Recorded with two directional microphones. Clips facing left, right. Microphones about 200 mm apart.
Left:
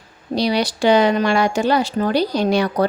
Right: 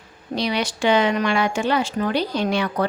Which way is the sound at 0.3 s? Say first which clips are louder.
Left 5 dB; 35° left (ahead or behind).